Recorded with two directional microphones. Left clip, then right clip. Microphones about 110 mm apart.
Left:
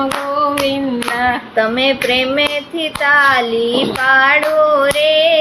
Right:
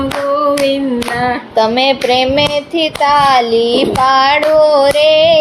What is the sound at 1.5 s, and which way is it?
Child singing, 30° right (ahead or behind).